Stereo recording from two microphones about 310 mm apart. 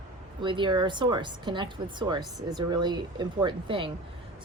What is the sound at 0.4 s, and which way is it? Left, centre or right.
A woman's voice, centre.